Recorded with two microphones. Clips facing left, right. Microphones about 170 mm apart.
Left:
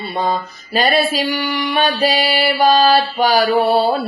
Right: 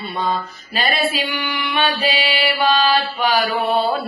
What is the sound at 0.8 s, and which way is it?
Mantra, 40° left (ahead or behind).